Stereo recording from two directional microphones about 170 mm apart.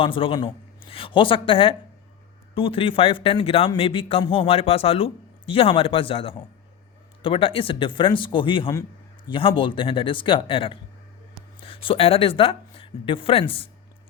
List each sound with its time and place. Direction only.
0.0 s speech: 30° left (ahead or behind)